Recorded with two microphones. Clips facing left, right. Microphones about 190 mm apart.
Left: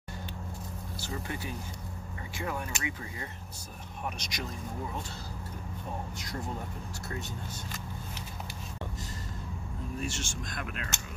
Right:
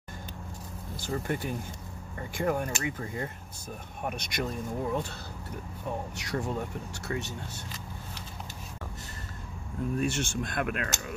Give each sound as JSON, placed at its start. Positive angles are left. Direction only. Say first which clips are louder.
{"t": 1.0, "sound": "speech", "louder": "right 6 dB", "side_deg": -50}
{"t": 6.1, "sound": "speech", "louder": "right 6 dB", "side_deg": -70}
{"t": 9.9, "sound": "speech", "louder": "right 7 dB", "side_deg": -60}